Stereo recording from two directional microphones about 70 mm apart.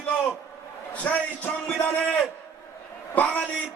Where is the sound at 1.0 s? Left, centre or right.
Left.